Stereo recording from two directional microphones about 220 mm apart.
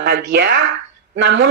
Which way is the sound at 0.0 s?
50° right (ahead or behind).